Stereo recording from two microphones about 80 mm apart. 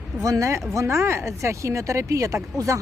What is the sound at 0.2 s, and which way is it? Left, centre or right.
Speech, right.